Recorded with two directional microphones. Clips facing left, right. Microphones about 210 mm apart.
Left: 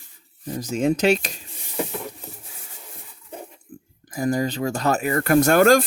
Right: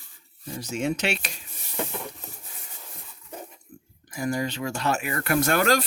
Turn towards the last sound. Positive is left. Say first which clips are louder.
# left 7 dB
turn(degrees=45)  # may be behind; listen again after turning